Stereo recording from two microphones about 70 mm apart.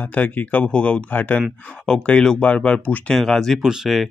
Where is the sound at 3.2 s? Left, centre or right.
Centre.